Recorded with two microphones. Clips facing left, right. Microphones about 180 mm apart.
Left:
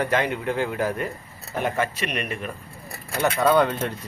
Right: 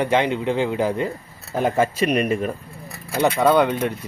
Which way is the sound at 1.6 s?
30° right (ahead or behind).